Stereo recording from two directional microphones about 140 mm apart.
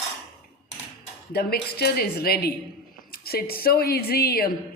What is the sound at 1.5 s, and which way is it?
A woman's voice, 90° left.